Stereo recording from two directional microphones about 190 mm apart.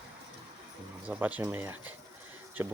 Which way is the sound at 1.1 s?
10° right (ahead or behind).